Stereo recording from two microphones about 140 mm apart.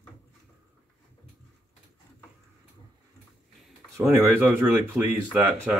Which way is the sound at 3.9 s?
15° right (ahead or behind).